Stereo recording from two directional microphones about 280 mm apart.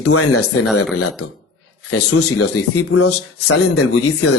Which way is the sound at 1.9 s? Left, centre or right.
Left.